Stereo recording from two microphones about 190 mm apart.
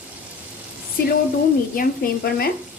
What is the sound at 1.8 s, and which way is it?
Speech, 50° left (ahead or behind).